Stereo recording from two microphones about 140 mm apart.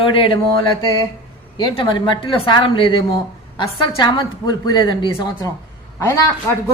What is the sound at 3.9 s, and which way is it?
A woman's voice, 35° left (ahead or behind).